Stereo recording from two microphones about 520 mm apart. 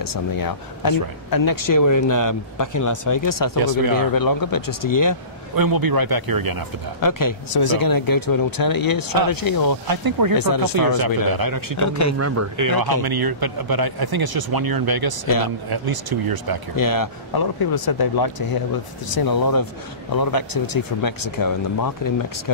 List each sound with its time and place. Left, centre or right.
0.0 s speech: left
3.5 s speech: right
4.1 s speech: left
5.6 s speech: right
7.0 s speech: left
9.8 s speech: right
10.3 s speech: left
10.9 s speech: right
11.7 s speech: left
12.2 s speech: right
16.7 s speech: left